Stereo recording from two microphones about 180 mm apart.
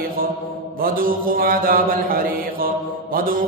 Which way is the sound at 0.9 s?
55° right (ahead or behind).